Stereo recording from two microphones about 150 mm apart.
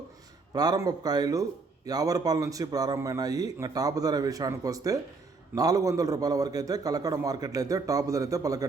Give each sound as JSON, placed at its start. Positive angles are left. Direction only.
{"t": 0.5, "sound": "a man's voice", "side_deg": -25}